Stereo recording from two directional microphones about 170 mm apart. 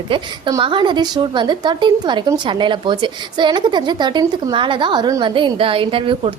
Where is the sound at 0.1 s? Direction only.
30° right (ahead or behind).